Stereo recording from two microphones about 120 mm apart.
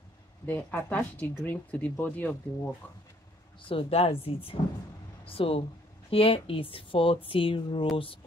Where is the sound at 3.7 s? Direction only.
55° left (ahead or behind).